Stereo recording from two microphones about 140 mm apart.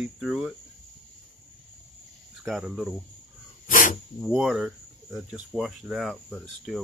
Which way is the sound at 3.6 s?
75° left (ahead or behind).